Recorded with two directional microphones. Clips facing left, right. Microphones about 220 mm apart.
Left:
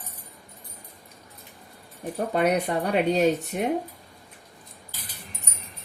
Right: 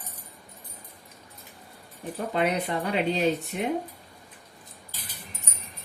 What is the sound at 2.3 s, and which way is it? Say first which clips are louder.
Speech: left 3 dB; 45° left (ahead or behind).